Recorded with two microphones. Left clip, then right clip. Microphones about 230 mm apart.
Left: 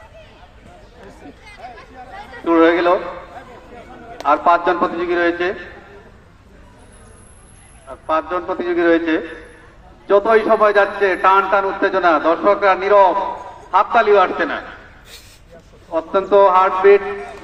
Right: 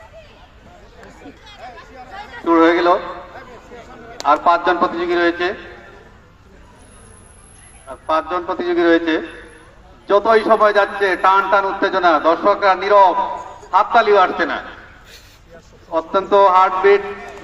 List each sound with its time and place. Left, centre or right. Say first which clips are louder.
2.4 s speech: even; right
4.3 s a man's voice: even; right
7.9 s a man's voice: right 1 dB; right
15.9 s a man's voice: even; right